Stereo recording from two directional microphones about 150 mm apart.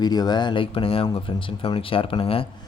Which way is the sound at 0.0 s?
25° left (ahead or behind).